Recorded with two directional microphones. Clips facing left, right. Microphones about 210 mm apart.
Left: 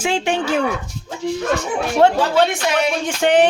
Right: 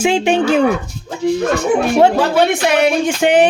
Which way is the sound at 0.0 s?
15° right (ahead or behind).